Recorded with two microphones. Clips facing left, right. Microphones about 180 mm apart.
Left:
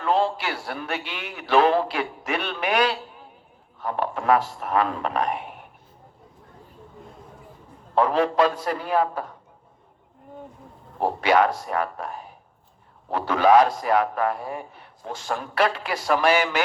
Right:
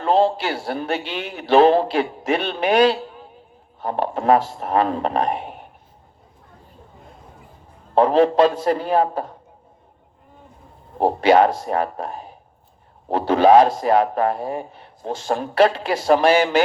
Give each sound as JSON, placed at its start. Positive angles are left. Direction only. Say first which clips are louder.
{"t": 0.0, "sound": "a man's voice", "louder": "right 5 dB", "side_deg": -25}
{"t": 7.9, "sound": "a man's voice", "louder": "right 5 dB", "side_deg": -25}
{"t": 10.9, "sound": "a man's voice", "louder": "right 5 dB", "side_deg": -25}